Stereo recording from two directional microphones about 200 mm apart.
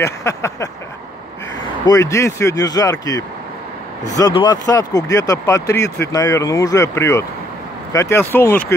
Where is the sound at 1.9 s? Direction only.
15° left (ahead or behind).